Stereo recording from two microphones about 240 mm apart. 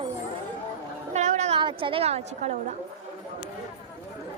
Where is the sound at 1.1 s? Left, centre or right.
Right.